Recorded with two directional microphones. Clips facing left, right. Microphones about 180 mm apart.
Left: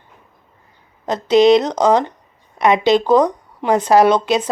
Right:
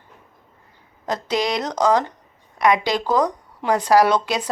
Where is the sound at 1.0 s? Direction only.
20° left (ahead or behind).